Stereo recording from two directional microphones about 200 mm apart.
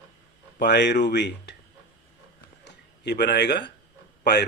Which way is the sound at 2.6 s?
55° left (ahead or behind).